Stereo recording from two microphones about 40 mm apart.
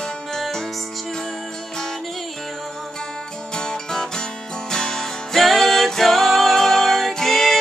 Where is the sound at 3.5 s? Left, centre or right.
Centre.